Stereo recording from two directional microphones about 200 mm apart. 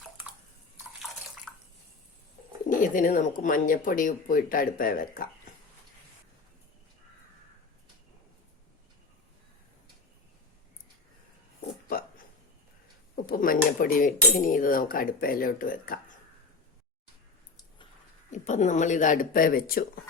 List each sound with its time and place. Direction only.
1.5 s bathtub: centre (ahead or behind)
2.6 s speech: 40° left (ahead or behind)
11.9 s a sound: 45° left (ahead or behind)
13.2 s speech: 45° left (ahead or behind)
18.3 s speech: 40° left (ahead or behind)